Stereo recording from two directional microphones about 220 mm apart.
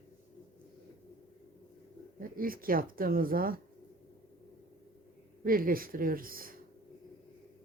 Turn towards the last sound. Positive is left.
turn(degrees=-40)  # may be behind; listen again after turning